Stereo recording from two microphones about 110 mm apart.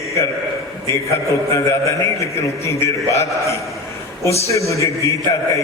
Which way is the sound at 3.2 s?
30° left (ahead or behind).